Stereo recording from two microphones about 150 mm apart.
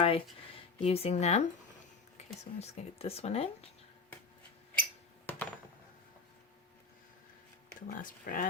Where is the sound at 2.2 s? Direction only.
50° left (ahead or behind).